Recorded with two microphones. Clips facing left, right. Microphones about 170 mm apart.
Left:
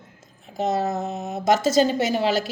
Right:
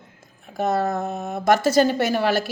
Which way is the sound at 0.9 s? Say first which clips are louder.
Right 1 dB; 55° right (ahead or behind).